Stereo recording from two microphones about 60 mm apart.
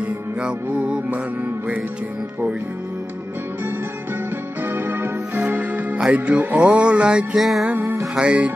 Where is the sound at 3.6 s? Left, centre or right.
Right; by 7.4 s centre.